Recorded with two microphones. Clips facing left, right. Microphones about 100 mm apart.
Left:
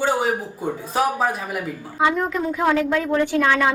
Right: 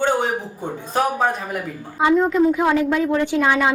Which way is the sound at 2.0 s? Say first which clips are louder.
Right 5 dB; 20° right (ahead or behind).